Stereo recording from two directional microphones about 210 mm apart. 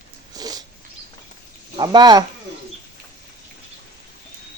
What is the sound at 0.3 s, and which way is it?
Zipper, 20° right (ahead or behind).